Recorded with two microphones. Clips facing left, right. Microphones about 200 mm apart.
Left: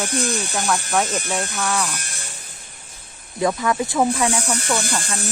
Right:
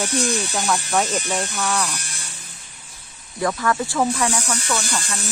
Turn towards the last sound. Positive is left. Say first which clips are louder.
# left 2 dB
turn(degrees=15)  # may be behind; listen again after turning